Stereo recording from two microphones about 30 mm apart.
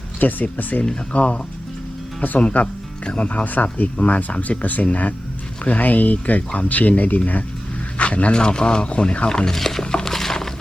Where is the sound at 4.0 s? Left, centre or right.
Left.